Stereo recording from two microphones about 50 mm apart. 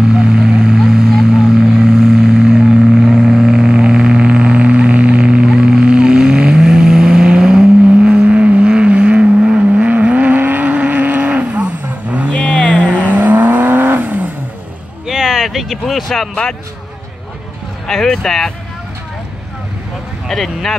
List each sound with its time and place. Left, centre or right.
0.1 s vehicle: centre
12.3 s vehicle: left
12.8 s vehicle: right
15.0 s a sound: centre
17.8 s speech: centre
20.2 s speech: centre